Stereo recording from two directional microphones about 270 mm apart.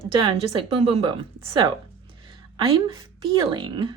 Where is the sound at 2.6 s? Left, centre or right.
Centre.